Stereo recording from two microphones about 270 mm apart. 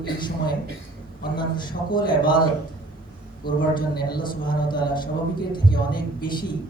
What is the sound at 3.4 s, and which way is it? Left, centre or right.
Speech, centre.